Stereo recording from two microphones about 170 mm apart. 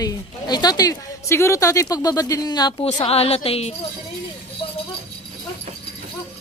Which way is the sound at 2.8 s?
35° left (ahead or behind).